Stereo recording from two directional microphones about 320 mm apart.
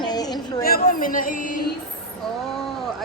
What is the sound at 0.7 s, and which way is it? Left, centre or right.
Speech, left.